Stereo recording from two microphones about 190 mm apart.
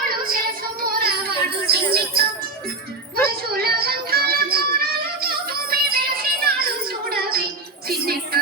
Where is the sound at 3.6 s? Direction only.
55° right (ahead or behind).